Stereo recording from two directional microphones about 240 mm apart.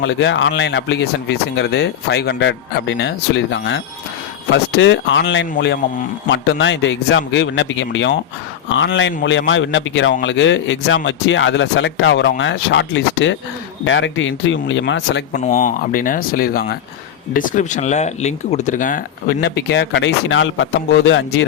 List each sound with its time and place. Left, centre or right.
0.0 s a man's voice: left
15.4 s speech: left